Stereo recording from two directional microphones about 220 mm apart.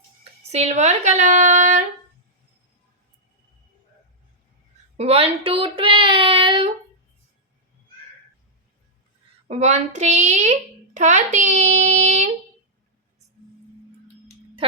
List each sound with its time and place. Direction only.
0.5 s a child's voice: 30° right (ahead or behind)
4.9 s speech: 25° right (ahead or behind)
9.5 s a child's voice: 30° right (ahead or behind)